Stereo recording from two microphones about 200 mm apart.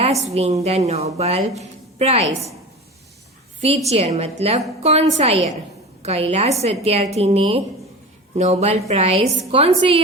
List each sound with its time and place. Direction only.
0.0 s a woman's voice: 30° right (ahead or behind)
3.8 s a woman's voice: 30° right (ahead or behind)